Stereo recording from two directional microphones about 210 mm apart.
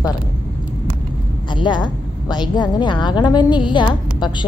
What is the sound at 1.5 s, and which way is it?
A woman's voice, 20° left (ahead or behind).